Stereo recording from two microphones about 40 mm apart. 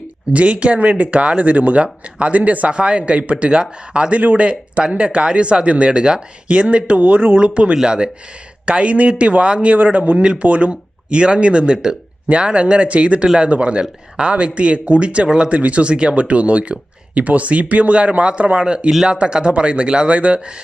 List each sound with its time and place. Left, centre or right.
0.3 s speech: right
2.7 s speech: right
3.3 s speech: right
4.1 s speech: right
7.0 s speech: right
7.3 s speech: right
13.2 s speech: centre
13.5 s speech: right